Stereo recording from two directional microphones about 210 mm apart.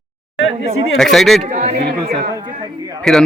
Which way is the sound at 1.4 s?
35° right (ahead or behind).